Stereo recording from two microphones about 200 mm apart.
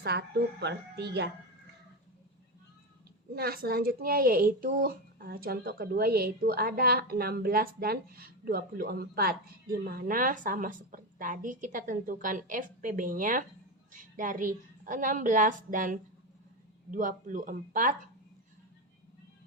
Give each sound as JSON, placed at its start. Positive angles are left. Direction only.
{"t": 0.0, "sound": "speech", "side_deg": -55}
{"t": 3.3, "sound": "a woman's voice", "side_deg": -50}